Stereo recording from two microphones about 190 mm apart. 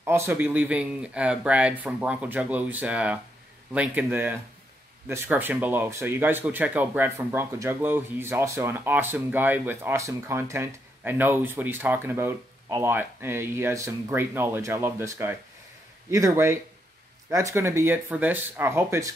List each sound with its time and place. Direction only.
0.0 s speech: 15° right (ahead or behind)